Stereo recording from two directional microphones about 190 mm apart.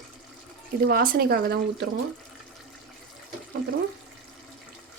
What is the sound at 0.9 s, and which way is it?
Speech, 50° right (ahead or behind).